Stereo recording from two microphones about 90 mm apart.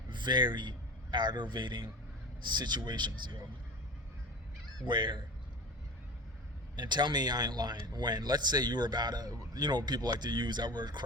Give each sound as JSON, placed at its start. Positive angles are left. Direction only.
{"t": 0.1, "sound": "a man's voice", "side_deg": -55}
{"t": 4.9, "sound": "a man's voice", "side_deg": -60}
{"t": 6.7, "sound": "a man's voice", "side_deg": -55}
{"t": 9.6, "sound": "a man's voice", "side_deg": -50}